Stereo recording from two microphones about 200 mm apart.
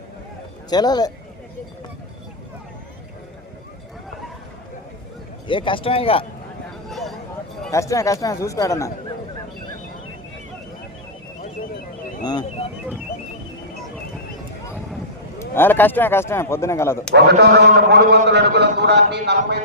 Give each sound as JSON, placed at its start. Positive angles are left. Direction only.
{"t": 0.7, "sound": "a man's voice", "side_deg": 20}
{"t": 5.5, "sound": "a man's voice", "side_deg": 25}
{"t": 7.7, "sound": "a man's voice", "side_deg": 15}
{"t": 12.2, "sound": "a man's voice", "side_deg": 20}
{"t": 15.5, "sound": "a man's voice", "side_deg": 10}
{"t": 17.2, "sound": "speech", "side_deg": -55}